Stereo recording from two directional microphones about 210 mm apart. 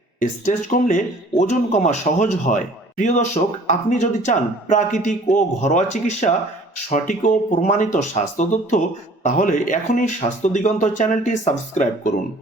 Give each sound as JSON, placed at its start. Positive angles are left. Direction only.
{"t": 0.2, "sound": "speech", "side_deg": 40}